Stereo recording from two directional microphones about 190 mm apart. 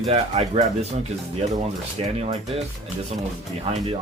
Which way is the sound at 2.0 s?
30° right (ahead or behind).